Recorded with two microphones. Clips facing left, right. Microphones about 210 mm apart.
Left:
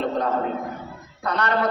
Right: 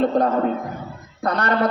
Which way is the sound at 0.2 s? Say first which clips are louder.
Right 6 dB; 45° right (ahead or behind).